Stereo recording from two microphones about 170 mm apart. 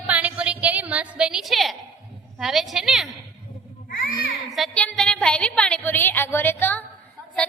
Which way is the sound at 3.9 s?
55° left (ahead or behind).